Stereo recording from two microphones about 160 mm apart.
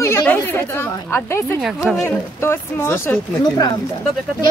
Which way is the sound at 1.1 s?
15° left (ahead or behind).